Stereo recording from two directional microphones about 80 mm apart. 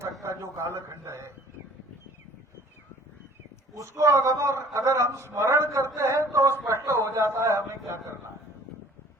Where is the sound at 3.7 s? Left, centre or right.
Right.